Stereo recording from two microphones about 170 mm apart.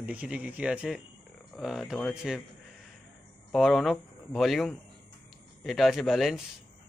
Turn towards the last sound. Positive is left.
turn(degrees=0)  # may be behind; listen again after turning